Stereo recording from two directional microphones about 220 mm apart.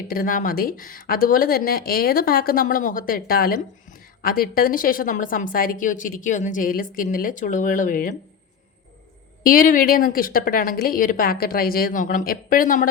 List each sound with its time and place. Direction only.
0.1 s a woman's voice: 40° left (ahead or behind)
9.4 s a woman's voice: 40° left (ahead or behind)